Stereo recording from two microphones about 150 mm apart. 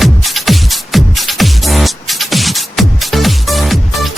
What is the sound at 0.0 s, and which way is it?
Music, centre (ahead or behind).